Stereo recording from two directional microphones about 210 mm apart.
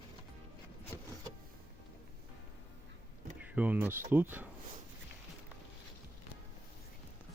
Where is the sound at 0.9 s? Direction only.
15° left (ahead or behind).